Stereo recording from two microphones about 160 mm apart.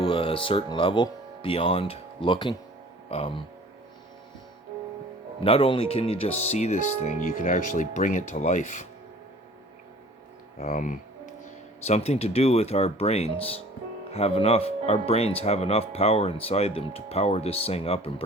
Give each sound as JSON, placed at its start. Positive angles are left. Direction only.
{"t": 0.0, "sound": "speech", "side_deg": 35}
{"t": 5.4, "sound": "speech", "side_deg": 35}
{"t": 7.4, "sound": "speech", "side_deg": 55}
{"t": 10.6, "sound": "music", "side_deg": 55}
{"t": 11.8, "sound": "speech", "side_deg": 40}